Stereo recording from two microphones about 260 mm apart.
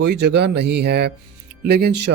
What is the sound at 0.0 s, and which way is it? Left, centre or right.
A man's voice, right.